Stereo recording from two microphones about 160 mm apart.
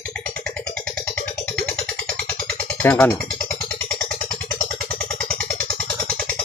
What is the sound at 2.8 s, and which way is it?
Speech, 10° left (ahead or behind).